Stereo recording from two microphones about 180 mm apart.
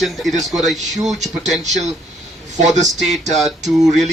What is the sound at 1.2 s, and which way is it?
Speech, 40° right (ahead or behind).